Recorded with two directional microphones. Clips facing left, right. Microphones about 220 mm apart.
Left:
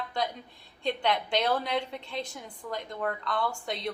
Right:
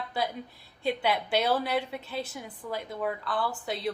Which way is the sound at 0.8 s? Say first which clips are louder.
Right 1 dB; 5° right (ahead or behind).